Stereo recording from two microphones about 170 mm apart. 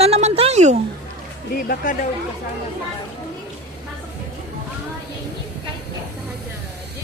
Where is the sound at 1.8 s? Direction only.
55° left (ahead or behind).